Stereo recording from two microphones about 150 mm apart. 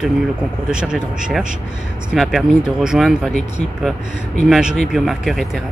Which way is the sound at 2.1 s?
Centre (ahead or behind).